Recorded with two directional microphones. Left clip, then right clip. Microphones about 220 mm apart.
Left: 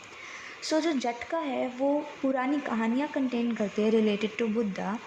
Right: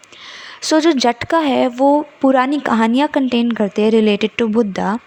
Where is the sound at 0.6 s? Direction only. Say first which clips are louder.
Right 14 dB; 40° right (ahead or behind).